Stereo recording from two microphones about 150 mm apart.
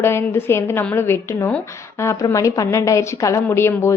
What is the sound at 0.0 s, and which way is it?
A woman's voice, 15° left (ahead or behind).